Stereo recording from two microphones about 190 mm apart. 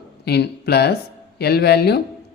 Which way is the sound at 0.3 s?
60° left (ahead or behind).